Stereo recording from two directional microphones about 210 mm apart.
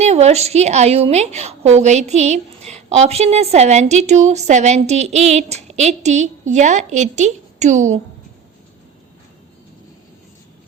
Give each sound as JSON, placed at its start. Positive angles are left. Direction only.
{"t": 0.0, "sound": "a woman's voice", "side_deg": -30}